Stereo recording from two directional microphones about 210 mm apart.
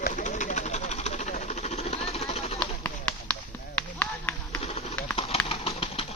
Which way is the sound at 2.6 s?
5° left (ahead or behind).